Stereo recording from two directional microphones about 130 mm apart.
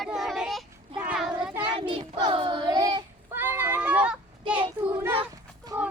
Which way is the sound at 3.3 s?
15° right (ahead or behind).